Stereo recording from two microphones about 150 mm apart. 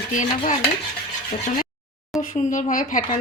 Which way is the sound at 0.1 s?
55° left (ahead or behind).